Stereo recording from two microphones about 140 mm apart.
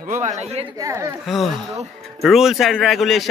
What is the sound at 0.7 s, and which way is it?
Speech, 20° right (ahead or behind).